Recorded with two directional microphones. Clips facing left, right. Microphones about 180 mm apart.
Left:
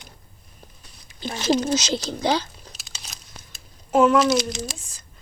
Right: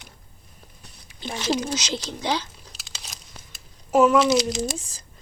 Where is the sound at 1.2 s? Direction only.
35° left (ahead or behind).